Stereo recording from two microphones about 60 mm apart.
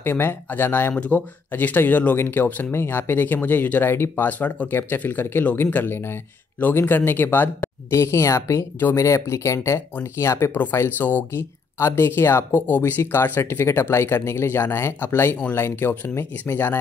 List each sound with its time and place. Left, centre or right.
0.0 s speech: left
0.9 s speech: left
3.9 s speech: left
4.3 s speech: left
7.9 s speech: left
10.5 s speech: left
11.3 s speech: left